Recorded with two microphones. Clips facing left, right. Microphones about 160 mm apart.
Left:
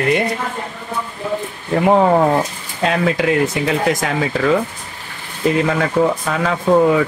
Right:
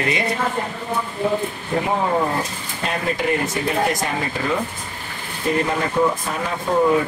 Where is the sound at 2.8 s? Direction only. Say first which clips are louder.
Left 7 dB; 90° left.